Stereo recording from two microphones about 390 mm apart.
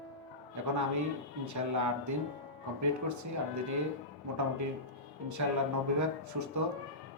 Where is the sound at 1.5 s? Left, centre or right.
Right.